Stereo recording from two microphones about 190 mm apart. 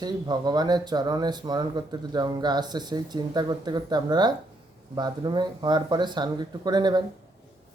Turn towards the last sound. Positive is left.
turn(degrees=-20)  # may be behind; listen again after turning